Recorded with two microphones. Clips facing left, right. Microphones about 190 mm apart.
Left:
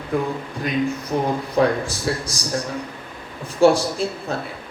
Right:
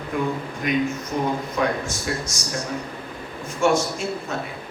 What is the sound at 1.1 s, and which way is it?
A man's voice, 30° left (ahead or behind).